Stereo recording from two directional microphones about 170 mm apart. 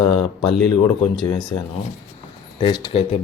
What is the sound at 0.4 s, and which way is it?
Speech, 30° left (ahead or behind).